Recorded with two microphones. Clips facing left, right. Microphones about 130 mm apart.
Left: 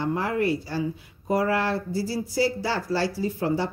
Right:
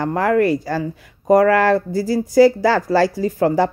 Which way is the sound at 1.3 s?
90° right.